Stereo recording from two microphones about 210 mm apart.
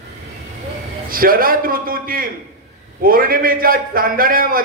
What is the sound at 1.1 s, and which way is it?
A man's voice, 45° right (ahead or behind).